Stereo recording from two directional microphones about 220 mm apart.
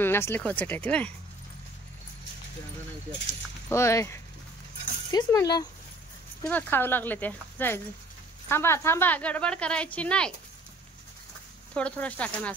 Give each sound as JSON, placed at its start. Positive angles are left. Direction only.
{"t": 0.0, "sound": "a woman's voice", "side_deg": 10}
{"t": 3.6, "sound": "a woman's voice", "side_deg": 10}
{"t": 11.7, "sound": "speech", "side_deg": 5}